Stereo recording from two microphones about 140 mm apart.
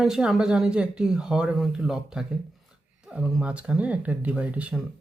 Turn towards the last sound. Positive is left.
turn(degrees=-10)  # may be behind; listen again after turning